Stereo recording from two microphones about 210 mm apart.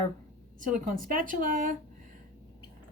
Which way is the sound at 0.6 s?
40° right (ahead or behind).